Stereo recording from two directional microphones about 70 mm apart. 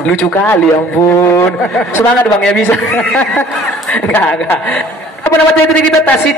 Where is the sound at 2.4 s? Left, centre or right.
Centre.